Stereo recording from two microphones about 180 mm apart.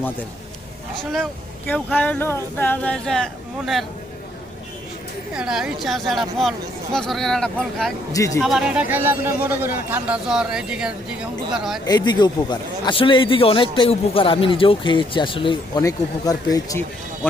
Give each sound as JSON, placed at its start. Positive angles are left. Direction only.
{"t": 1.1, "sound": "speech", "side_deg": 5}
{"t": 5.3, "sound": "speech", "side_deg": -5}
{"t": 8.1, "sound": "speech", "side_deg": 15}
{"t": 8.4, "sound": "speech", "side_deg": 0}
{"t": 11.9, "sound": "a man's voice", "side_deg": 25}